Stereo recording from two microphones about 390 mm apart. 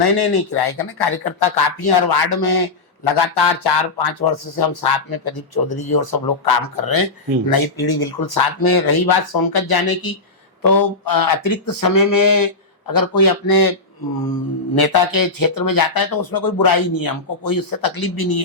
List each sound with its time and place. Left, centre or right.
0.0 s speech: left
14.8 s speech: left